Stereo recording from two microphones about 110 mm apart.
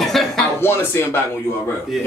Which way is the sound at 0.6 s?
20° left (ahead or behind).